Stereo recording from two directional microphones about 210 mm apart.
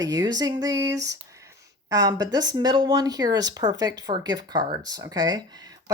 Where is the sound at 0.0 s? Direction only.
20° right (ahead or behind).